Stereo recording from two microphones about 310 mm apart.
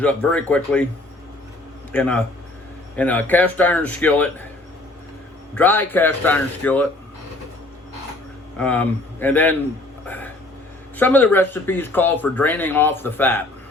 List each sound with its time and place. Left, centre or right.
0.0 s a man's voice: centre
1.9 s a man's voice: centre
5.5 s a man's voice: centre
8.5 s a man's voice: centre
10.1 s a sound: centre
10.9 s speech: centre